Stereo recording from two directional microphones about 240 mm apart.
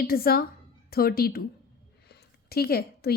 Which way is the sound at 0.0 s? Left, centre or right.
Left.